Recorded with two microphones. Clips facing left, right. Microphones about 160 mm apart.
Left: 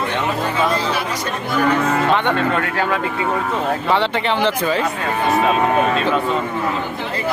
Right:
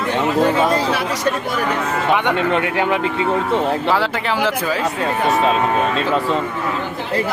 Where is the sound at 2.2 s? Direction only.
20° right (ahead or behind).